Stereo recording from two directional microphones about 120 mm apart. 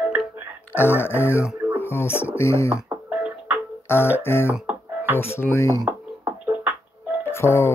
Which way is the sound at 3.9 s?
20° left (ahead or behind).